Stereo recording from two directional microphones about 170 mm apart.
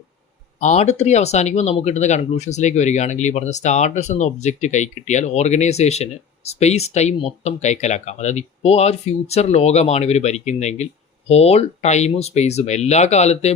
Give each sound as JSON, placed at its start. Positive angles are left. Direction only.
{"t": 0.6, "sound": "speech", "side_deg": 40}